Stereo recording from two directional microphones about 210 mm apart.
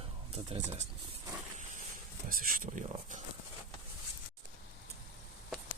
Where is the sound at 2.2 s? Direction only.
40° right (ahead or behind).